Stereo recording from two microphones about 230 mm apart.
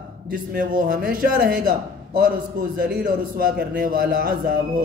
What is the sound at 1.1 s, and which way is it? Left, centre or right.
A man's voice, right.